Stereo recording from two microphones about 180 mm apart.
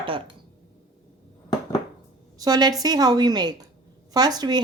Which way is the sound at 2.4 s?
20° right (ahead or behind).